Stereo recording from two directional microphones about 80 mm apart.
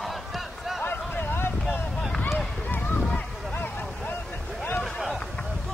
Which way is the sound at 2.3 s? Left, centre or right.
Centre.